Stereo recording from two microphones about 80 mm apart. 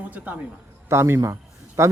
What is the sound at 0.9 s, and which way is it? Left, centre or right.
Speech, right.